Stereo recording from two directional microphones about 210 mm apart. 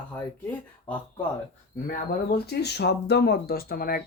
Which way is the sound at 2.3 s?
50° left (ahead or behind).